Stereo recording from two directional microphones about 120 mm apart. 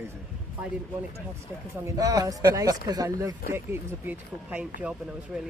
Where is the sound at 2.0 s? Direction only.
30° right (ahead or behind).